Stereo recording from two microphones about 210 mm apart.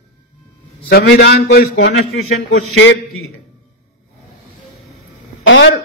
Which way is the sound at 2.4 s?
75° left (ahead or behind).